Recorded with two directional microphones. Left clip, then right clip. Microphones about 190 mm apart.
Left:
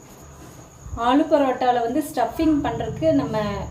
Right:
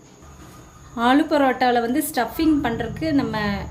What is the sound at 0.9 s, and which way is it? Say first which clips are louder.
A woman's voice: even; 55° right (ahead or behind).